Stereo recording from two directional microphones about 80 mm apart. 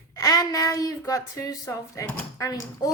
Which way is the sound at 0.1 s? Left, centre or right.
Left.